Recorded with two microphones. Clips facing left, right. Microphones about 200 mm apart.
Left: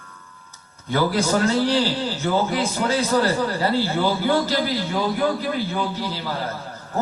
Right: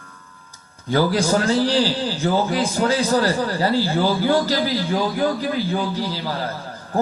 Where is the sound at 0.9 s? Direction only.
30° right (ahead or behind).